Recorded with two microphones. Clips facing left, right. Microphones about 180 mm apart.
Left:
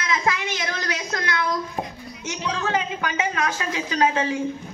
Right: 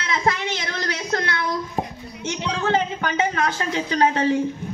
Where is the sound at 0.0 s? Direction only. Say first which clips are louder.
Right 1 dB; 35° right (ahead or behind).